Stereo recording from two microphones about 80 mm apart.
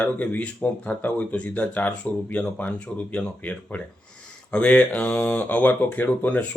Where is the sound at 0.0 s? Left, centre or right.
Centre.